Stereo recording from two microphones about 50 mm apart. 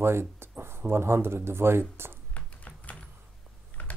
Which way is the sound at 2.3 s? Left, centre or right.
Left.